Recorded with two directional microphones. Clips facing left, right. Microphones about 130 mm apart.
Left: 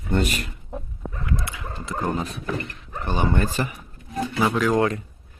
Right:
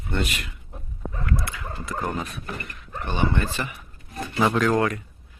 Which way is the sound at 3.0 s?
40° left (ahead or behind).